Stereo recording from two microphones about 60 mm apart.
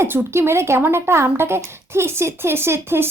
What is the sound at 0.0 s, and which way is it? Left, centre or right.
A woman's voice, right.